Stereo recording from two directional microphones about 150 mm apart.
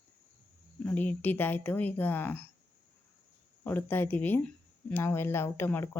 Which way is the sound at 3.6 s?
10° left (ahead or behind).